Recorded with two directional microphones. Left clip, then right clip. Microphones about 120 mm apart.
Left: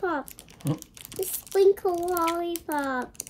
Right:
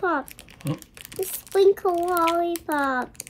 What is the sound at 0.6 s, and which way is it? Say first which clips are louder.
Crumpling: even; 10° left (ahead or behind).